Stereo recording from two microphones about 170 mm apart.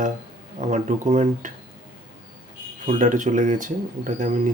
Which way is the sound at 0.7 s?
45° right (ahead or behind).